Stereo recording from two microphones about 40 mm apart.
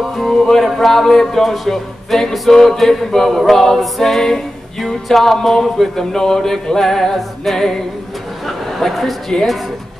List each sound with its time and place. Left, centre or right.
0.0 s music: centre
0.3 s music: centre
8.5 s chatter: centre
9.3 s music: centre